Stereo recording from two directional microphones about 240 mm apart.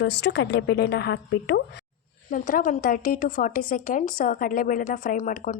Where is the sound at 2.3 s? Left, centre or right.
Left.